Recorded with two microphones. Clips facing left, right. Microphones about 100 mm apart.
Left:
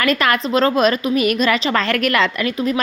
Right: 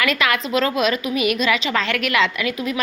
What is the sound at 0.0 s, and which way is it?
A woman's voice, 40° left (ahead or behind).